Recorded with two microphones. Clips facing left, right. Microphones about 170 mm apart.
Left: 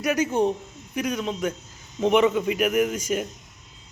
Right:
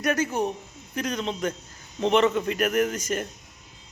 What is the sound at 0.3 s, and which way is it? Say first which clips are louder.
Speech: left 5 dB; 30° left (ahead or behind).